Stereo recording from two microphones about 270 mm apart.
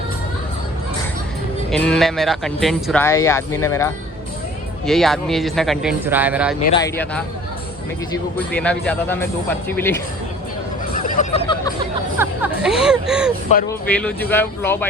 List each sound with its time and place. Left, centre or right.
1.7 s speech: centre
6.7 s speech: centre
10.9 s hubbub: left
12.2 s speech: centre